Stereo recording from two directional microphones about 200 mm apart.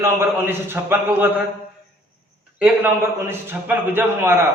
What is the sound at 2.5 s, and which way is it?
A man's voice, 10° right (ahead or behind).